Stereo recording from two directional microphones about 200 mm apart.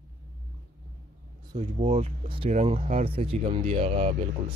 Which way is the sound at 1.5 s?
35° right (ahead or behind).